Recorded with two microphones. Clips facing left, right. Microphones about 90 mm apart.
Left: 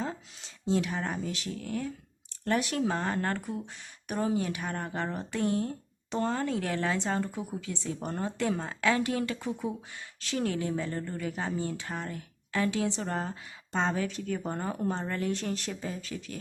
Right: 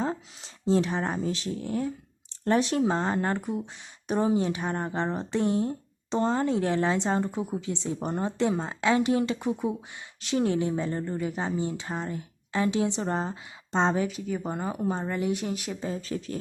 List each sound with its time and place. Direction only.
0.0 s speech: 35° right (ahead or behind)
14.1 s speech: 10° right (ahead or behind)
15.8 s speech: 30° right (ahead or behind)